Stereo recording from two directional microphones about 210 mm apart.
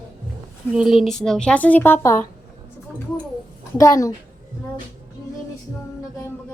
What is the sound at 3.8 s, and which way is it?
Speech, 15° left (ahead or behind).